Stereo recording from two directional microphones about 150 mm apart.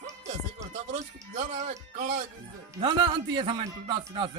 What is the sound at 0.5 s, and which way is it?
Speech, 50° right (ahead or behind).